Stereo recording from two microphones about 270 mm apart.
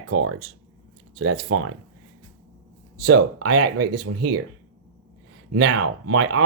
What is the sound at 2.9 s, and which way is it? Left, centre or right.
Speech, right.